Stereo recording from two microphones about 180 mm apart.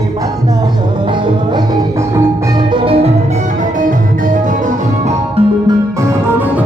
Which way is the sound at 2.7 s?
30° right (ahead or behind).